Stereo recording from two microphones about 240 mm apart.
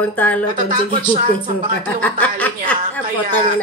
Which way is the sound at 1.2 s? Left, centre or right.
Right.